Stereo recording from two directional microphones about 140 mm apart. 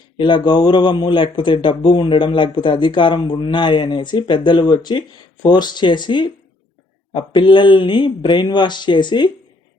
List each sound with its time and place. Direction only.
0.2 s speech: 35° left (ahead or behind)